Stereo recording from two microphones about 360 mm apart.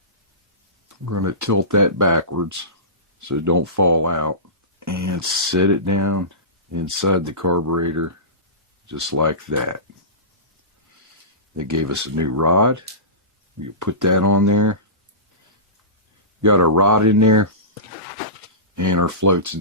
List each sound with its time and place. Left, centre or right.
1.0 s speech: right
11.5 s speech: right
16.4 s speech: right
18.8 s speech: right